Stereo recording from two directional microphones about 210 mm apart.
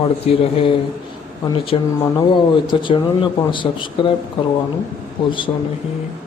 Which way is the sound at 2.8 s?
25° left (ahead or behind).